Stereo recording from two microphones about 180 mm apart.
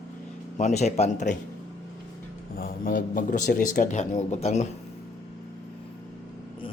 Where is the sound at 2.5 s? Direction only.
55° left (ahead or behind); by 4.7 s 35° left (ahead or behind).